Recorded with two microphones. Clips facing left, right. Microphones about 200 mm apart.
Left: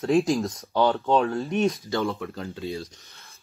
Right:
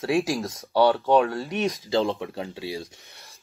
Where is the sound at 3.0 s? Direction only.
15° right (ahead or behind).